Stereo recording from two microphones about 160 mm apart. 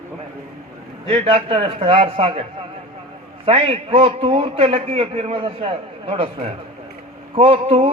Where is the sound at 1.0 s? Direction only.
35° right (ahead or behind).